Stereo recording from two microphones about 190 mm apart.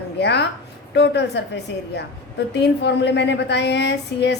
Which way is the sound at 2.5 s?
65° left (ahead or behind).